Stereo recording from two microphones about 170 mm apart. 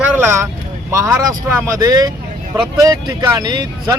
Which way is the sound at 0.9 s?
15° right (ahead or behind).